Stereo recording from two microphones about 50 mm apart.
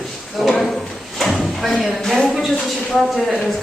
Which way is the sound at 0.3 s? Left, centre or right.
Centre.